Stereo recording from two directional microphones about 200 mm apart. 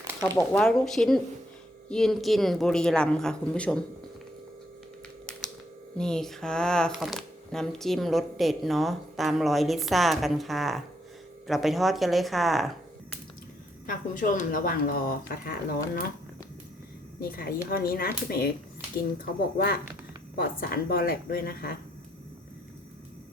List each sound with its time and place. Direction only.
0.5 s speech: 5° left (ahead or behind)
6.0 s speech: 5° left (ahead or behind)
13.8 s speech: 45° left (ahead or behind)
17.2 s speech: 50° left (ahead or behind)